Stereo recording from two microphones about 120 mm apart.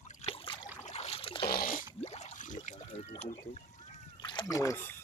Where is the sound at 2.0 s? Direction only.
65° left (ahead or behind).